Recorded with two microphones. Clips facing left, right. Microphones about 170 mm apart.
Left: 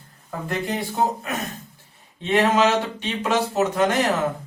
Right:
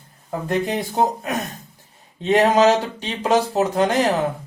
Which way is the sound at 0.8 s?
45° right (ahead or behind).